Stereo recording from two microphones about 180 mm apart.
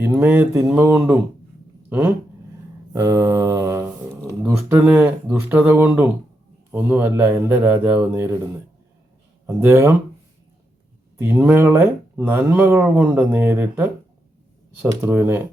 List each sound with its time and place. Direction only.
0.0 s speech: 10° right (ahead or behind)
2.9 s mantra: 15° right (ahead or behind)
4.4 s speech: 10° right (ahead or behind)
9.6 s speech: 10° right (ahead or behind)
11.2 s speech: 10° right (ahead or behind)